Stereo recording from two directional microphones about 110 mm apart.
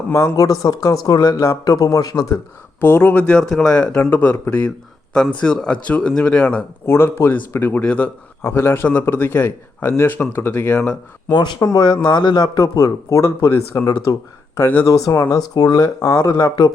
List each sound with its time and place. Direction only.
0.1 s speech: 30° left (ahead or behind)
2.8 s speech: 20° left (ahead or behind)
6.8 s a man's voice: 20° left (ahead or behind)
11.3 s speech: 40° left (ahead or behind)